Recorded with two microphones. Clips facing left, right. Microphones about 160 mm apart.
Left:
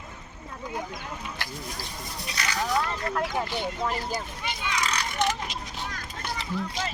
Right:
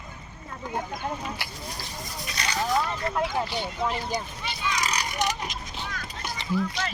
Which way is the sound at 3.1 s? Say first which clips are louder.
Right 1 dB; 5° right (ahead or behind).